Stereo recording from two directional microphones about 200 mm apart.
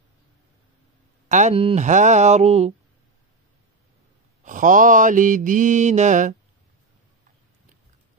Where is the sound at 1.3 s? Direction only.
35° right (ahead or behind).